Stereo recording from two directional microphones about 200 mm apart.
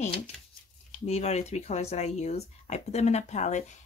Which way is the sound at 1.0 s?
30° left (ahead or behind).